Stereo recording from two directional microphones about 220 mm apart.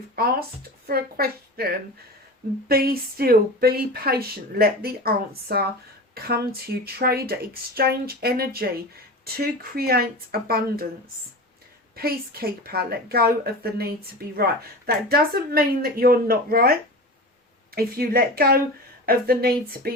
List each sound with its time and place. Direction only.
0.2 s speech: 45° right (ahead or behind)
11.9 s speech: 45° right (ahead or behind)
17.7 s speech: 45° right (ahead or behind)